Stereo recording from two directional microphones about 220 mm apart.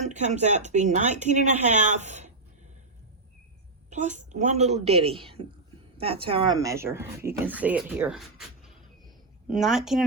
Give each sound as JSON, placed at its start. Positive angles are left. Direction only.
{"t": 0.0, "sound": "speech", "side_deg": -30}
{"t": 3.8, "sound": "a woman's voice", "side_deg": -35}